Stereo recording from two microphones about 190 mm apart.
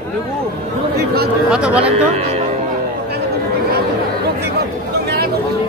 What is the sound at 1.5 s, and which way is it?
Speech, 5° right (ahead or behind).